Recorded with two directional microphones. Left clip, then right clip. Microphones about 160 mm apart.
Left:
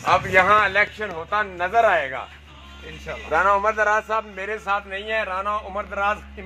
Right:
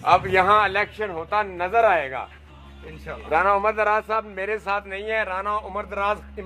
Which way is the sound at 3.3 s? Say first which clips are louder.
Left 1 dB; 35° right (ahead or behind).